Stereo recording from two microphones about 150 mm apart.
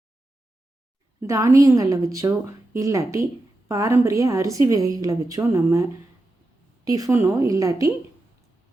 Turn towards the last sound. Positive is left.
turn(degrees=-20)  # may be behind; listen again after turning